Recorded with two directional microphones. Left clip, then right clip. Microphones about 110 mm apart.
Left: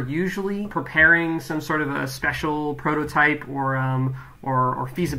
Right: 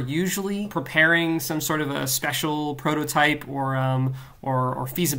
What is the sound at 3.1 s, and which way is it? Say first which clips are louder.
Speech: left 1 dB; 30° right (ahead or behind).